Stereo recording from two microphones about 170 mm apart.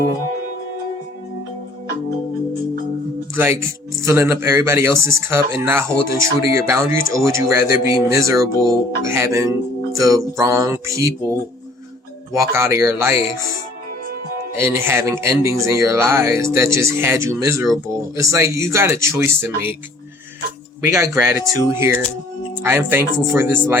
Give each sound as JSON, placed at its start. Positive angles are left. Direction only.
{"t": 3.3, "sound": "speech", "side_deg": -15}
{"t": 14.6, "sound": "speech", "side_deg": -15}
{"t": 20.9, "sound": "speech", "side_deg": -15}